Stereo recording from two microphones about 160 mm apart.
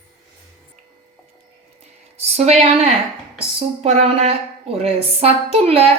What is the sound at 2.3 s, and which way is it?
A woman's voice, 40° right (ahead or behind).